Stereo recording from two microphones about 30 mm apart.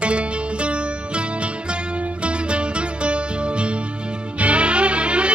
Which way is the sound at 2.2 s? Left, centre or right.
Right.